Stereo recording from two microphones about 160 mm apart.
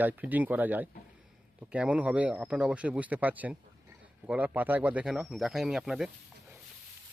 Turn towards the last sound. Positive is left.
turn(degrees=-5)  # may be behind; listen again after turning